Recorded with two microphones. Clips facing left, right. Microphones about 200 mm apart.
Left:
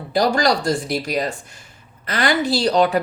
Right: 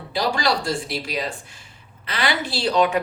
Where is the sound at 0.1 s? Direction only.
45° left (ahead or behind).